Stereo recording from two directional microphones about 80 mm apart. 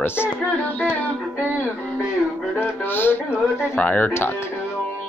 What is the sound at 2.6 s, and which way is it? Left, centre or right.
Speech, left.